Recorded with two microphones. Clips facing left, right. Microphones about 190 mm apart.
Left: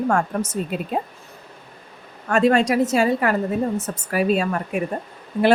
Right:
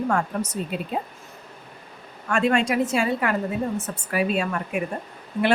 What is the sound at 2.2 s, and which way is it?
A woman's voice, 40° left (ahead or behind).